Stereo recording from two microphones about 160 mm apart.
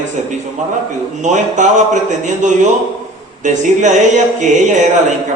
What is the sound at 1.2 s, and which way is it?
Speech, 50° right (ahead or behind).